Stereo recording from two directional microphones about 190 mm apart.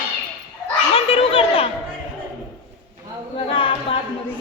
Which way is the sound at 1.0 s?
30° left (ahead or behind).